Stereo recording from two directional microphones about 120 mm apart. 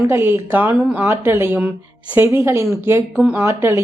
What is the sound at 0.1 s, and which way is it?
A woman's voice, 20° right (ahead or behind).